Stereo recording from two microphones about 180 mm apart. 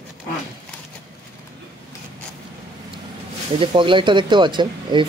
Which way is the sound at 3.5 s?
25° right (ahead or behind).